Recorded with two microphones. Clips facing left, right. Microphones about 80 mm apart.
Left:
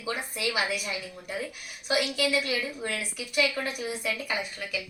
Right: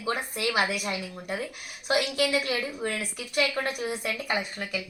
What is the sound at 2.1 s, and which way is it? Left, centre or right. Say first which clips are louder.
Speech: right 1 dB; right.